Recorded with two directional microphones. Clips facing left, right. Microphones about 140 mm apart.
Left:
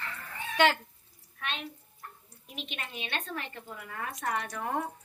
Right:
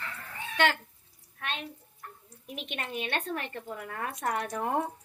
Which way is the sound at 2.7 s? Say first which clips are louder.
Right 6 dB; 50° right (ahead or behind).